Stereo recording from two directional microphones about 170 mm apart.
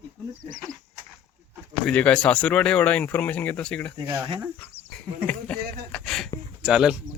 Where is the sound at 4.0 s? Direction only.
25° right (ahead or behind).